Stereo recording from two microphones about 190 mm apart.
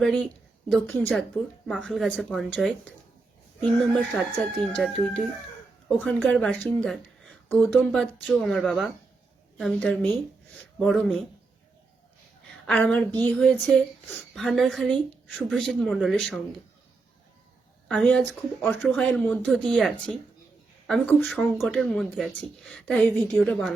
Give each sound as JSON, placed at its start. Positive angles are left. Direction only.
{"t": 0.0, "sound": "a woman's voice", "side_deg": 0}
{"t": 12.6, "sound": "a woman's voice", "side_deg": 5}
{"t": 17.8, "sound": "a woman's voice", "side_deg": 5}